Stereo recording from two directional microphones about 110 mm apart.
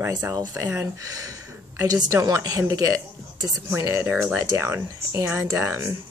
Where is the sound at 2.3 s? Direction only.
30° right (ahead or behind).